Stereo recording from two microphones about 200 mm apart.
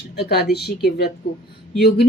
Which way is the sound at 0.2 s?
55° left (ahead or behind).